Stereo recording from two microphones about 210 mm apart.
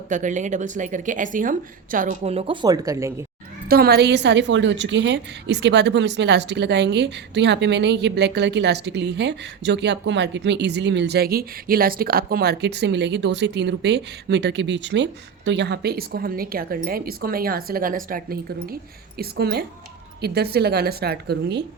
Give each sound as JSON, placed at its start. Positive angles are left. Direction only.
{"t": 0.1, "sound": "speech", "side_deg": -35}
{"t": 3.7, "sound": "a woman's voice", "side_deg": -50}